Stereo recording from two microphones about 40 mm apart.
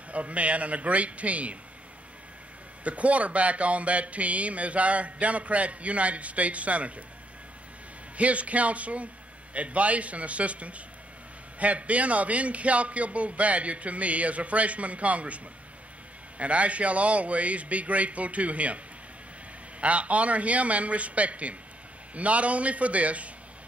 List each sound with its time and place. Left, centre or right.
0.1 s speech: right
2.8 s speech: right
8.2 s speech: right
19.8 s speech: right